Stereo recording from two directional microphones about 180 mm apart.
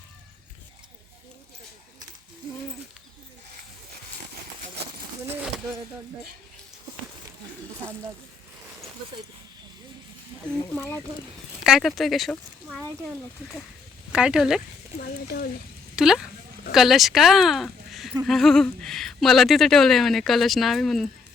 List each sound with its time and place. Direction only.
11.6 s speech: centre (ahead or behind)
14.1 s speech: 5° right (ahead or behind)
16.0 s speech: centre (ahead or behind)